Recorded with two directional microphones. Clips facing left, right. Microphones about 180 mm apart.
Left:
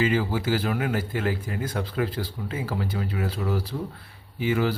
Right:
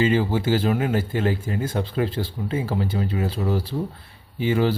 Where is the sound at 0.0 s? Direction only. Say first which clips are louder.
Right 4 dB; 25° right (ahead or behind).